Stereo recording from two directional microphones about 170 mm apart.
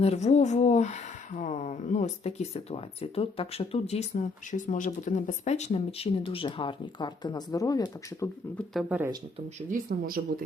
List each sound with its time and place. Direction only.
0.0 s speech: 40° left (ahead or behind)
4.2 s speech: 50° left (ahead or behind); by 8.3 s 20° left (ahead or behind)
8.9 s speech: 10° right (ahead or behind)
9.6 s speech: 50° right (ahead or behind)
9.9 s speech: 65° right (ahead or behind)